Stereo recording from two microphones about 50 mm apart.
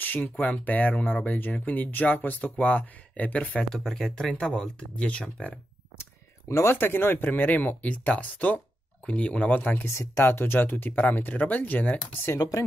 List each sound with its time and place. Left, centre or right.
0.2 s speech: left
3.7 s speech: centre
4.3 s speech: centre
6.7 s speech: left
9.8 s speech: left